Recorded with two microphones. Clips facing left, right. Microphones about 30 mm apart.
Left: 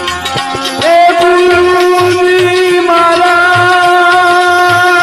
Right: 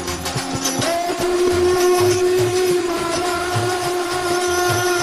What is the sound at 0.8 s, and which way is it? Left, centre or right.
Music, left.